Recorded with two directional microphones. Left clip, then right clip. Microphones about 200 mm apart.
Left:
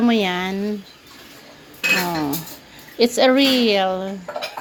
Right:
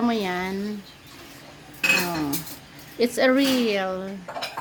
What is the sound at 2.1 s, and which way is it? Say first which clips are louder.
Cutlery: left 4 dB; 20° left (ahead or behind).